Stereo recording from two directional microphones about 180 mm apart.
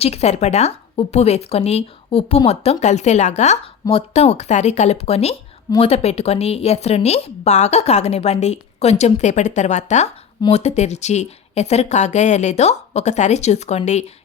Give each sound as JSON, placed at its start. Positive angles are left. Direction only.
{"t": 0.0, "sound": "a woman's voice", "side_deg": 35}